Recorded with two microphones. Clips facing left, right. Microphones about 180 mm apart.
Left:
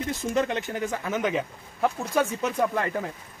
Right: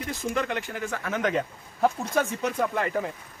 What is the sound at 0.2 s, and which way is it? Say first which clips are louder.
Speech: left 2 dB; 20° left (ahead or behind).